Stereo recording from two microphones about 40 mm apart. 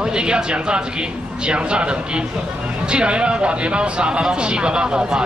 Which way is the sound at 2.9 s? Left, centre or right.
Right.